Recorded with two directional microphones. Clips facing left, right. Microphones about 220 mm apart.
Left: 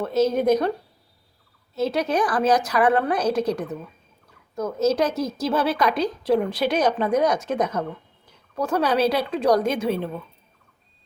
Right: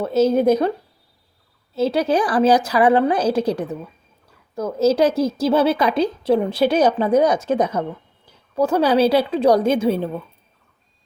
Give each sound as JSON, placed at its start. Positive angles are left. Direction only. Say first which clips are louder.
{"t": 0.0, "sound": "a woman's voice", "louder": "right 4 dB", "side_deg": -30}
{"t": 1.7, "sound": "a woman's voice", "louder": "right 4 dB", "side_deg": -30}